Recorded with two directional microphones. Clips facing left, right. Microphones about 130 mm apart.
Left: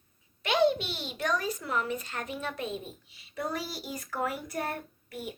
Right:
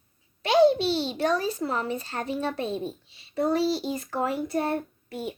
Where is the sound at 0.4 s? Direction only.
35° right (ahead or behind).